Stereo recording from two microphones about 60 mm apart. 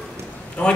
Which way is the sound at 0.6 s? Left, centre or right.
Centre.